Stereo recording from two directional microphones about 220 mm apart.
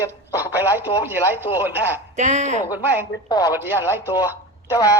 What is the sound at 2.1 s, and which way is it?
Speech, 35° right (ahead or behind).